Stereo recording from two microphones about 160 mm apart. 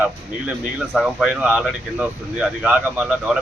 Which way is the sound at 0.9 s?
5° right (ahead or behind).